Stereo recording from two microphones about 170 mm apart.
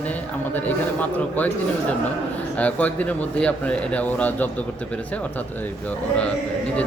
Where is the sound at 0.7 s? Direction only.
10° left (ahead or behind).